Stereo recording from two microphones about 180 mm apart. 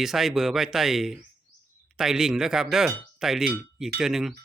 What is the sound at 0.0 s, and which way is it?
Speech, centre (ahead or behind).